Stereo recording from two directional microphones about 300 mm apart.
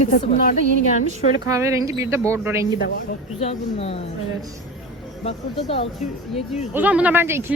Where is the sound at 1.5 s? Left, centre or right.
Centre.